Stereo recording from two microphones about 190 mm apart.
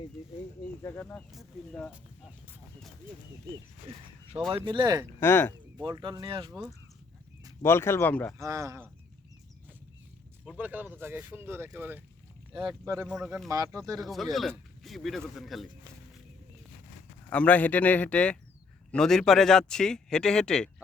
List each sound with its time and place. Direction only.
0.8 s a man's voice: 15° left (ahead or behind)
3.8 s speech: 30° right (ahead or behind)
5.2 s a man's voice: 10° left (ahead or behind)
5.7 s speech: 25° right (ahead or behind)
7.6 s a man's voice: 15° left (ahead or behind)
8.4 s speech: 15° right (ahead or behind)
10.6 s speech: 10° right (ahead or behind)
13.1 s speech: centre (ahead or behind)
13.5 s speech: 20° right (ahead or behind)
14.0 s speech: centre (ahead or behind)
17.2 s a man's voice: 5° left (ahead or behind)